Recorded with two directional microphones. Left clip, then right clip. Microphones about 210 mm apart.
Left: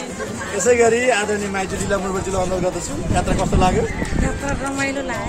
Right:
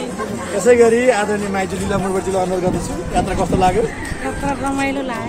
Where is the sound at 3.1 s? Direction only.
30° left (ahead or behind).